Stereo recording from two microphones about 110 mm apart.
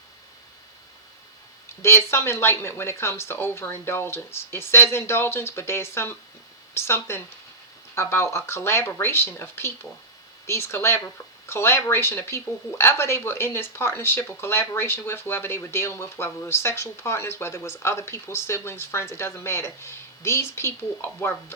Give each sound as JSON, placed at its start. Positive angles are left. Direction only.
{"t": 1.8, "sound": "speech", "side_deg": 25}